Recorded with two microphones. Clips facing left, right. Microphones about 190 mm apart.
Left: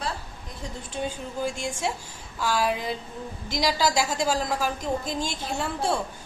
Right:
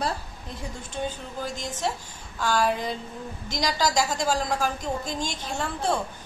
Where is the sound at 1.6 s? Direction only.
10° left (ahead or behind).